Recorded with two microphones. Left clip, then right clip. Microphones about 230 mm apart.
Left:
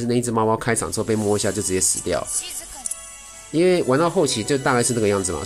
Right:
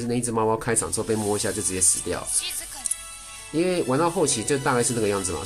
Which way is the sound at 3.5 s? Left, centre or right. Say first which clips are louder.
Left 5 dB; centre.